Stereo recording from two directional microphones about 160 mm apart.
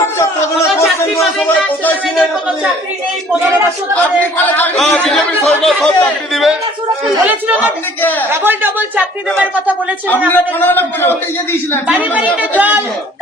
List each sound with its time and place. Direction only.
0.2 s chatter: 15° left (ahead or behind)
4.5 s a man's voice: 10° left (ahead or behind)
8.3 s speech: 15° right (ahead or behind)
10.3 s a man's voice: 15° left (ahead or behind)
11.9 s speech: 10° right (ahead or behind)